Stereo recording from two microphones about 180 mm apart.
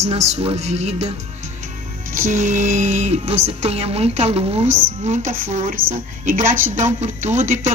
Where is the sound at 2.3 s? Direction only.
40° right (ahead or behind).